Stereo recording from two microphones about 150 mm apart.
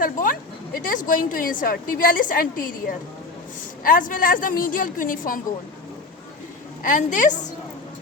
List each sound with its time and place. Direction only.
0.0 s a woman's voice: 65° left (ahead or behind)
6.8 s a woman's voice: 60° left (ahead or behind)